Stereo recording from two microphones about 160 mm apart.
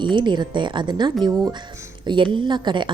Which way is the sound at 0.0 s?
30° right (ahead or behind).